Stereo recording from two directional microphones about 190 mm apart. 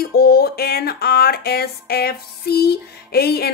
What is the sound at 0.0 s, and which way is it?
Music, 55° left (ahead or behind).